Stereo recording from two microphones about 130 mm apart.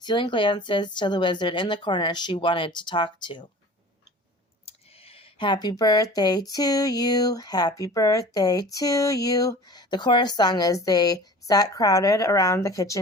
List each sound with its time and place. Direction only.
0.0 s speech: 35° left (ahead or behind)
4.6 s speech: 50° left (ahead or behind); by 13.0 s 25° left (ahead or behind)